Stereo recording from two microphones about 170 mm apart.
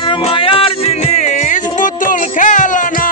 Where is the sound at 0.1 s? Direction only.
30° left (ahead or behind).